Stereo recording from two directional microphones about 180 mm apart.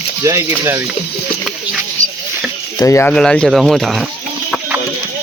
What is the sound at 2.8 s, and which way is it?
Speech, 15° left (ahead or behind).